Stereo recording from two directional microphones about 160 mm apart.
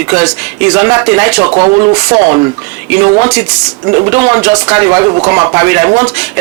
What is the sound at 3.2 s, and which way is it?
Speech, 15° right (ahead or behind).